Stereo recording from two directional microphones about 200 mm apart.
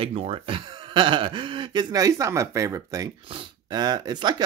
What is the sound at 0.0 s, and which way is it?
Speech, 30° right (ahead or behind).